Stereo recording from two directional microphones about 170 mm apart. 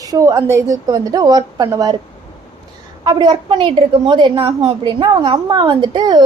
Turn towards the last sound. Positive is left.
turn(degrees=-25)  # may be behind; listen again after turning